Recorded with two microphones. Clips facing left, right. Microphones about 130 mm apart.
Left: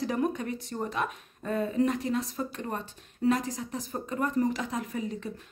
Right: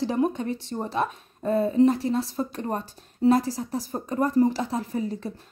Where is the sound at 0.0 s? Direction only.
30° right (ahead or behind).